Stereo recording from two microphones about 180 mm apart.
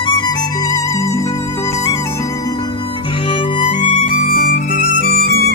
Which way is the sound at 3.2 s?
30° left (ahead or behind).